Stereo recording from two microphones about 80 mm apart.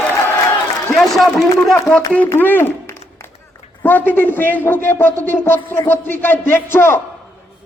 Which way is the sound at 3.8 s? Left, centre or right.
Left.